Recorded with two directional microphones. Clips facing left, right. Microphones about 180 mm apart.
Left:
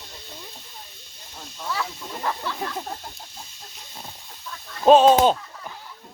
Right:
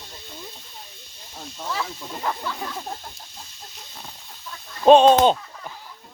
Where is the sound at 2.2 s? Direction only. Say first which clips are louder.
Even; 5° right (ahead or behind).